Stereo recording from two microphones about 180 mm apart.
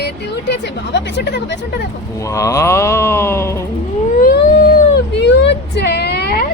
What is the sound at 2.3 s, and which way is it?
Speech, 20° left (ahead or behind).